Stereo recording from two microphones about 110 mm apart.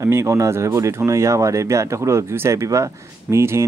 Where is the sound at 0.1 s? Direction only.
25° right (ahead or behind).